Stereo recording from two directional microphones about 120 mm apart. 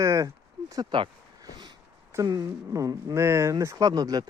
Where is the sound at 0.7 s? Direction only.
40° right (ahead or behind).